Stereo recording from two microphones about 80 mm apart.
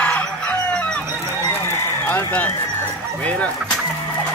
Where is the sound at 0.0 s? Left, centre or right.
Centre.